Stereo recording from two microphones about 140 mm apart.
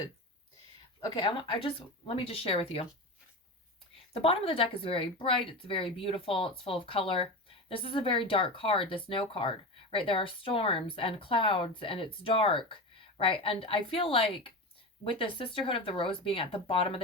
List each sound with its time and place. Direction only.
1.2 s speech: 40° left (ahead or behind)
4.1 s speech: 40° left (ahead or behind)